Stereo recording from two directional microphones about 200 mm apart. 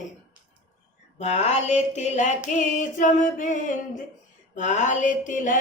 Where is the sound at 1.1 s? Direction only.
35° left (ahead or behind).